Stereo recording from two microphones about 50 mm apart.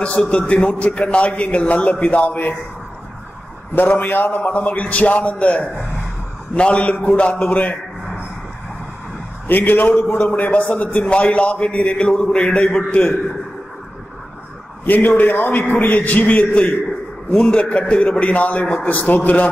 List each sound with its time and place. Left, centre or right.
0.0 s a man's voice: left
3.7 s a man's voice: left
9.5 s a man's voice: left
14.9 s a man's voice: left